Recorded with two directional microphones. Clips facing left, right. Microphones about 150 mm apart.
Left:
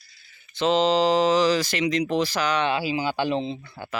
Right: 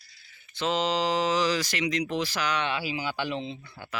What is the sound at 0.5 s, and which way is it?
Speech, 25° left (ahead or behind).